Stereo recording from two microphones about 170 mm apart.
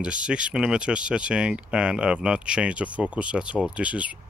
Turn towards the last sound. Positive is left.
turn(degrees=-5)  # may be behind; listen again after turning